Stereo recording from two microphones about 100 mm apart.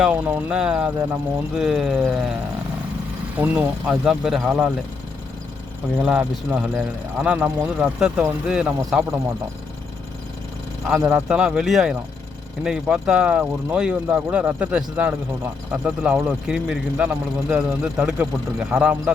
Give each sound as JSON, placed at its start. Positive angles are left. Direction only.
{"t": 0.0, "sound": "speech", "side_deg": -15}
{"t": 3.3, "sound": "speech", "side_deg": -20}
{"t": 3.8, "sound": "speech", "side_deg": -5}
{"t": 6.0, "sound": "speech", "side_deg": -10}
{"t": 10.8, "sound": "speech", "side_deg": -10}